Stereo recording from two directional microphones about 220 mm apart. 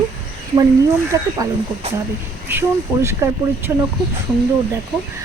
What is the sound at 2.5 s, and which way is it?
Speech, 10° right (ahead or behind).